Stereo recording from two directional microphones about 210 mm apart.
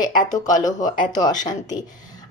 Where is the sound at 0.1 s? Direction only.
20° left (ahead or behind).